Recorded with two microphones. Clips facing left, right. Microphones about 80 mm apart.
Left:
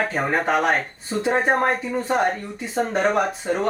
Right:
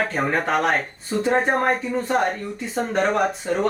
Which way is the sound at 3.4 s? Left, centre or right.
Left.